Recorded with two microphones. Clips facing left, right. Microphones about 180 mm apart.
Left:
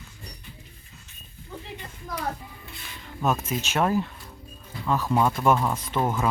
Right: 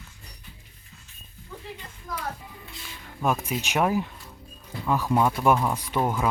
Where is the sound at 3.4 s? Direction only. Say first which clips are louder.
Even; 15° right (ahead or behind).